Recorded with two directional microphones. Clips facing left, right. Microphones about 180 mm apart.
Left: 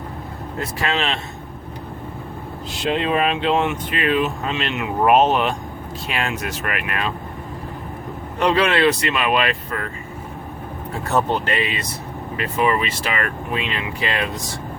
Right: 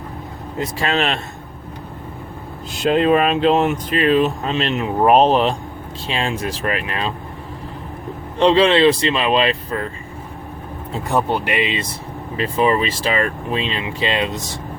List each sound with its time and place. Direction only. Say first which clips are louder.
0.9 s speech: right 3 dB; 40° right (ahead or behind)
2.9 s speech: right 5 dB; 45° right (ahead or behind)
8.4 s speech: right 5 dB; 25° right (ahead or behind)
10.9 s speech: right 1 dB; 15° right (ahead or behind)
12.4 s speech: right 3 dB; 30° right (ahead or behind)